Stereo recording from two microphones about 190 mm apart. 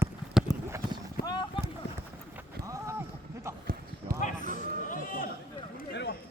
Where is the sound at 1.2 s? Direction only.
20° left (ahead or behind).